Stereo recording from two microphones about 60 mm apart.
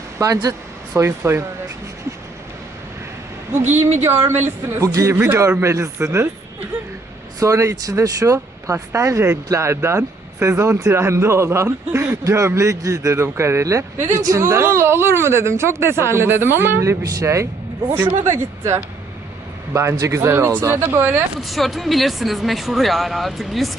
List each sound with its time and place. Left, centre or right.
0.2 s speech: right
0.9 s speech: right
3.7 s speech: right
4.8 s a man's voice: right
5.5 s speech: right
7.3 s speech: right
10.6 s speech: right
10.9 s speech: right
13.1 s speech: right
14.3 s speech: right
17.0 s speech: right
17.9 s speech: right
21.4 s speech: centre